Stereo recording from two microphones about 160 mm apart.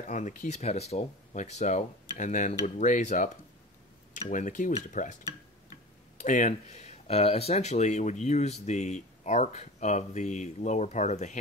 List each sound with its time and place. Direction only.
0.1 s speech: 50° left (ahead or behind)
6.1 s speech: 50° left (ahead or behind)